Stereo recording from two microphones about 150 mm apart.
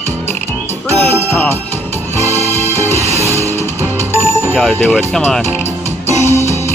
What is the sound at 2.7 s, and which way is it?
Music, 15° left (ahead or behind).